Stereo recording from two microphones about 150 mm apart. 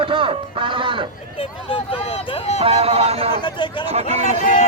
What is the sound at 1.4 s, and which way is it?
Speech, 35° left (ahead or behind).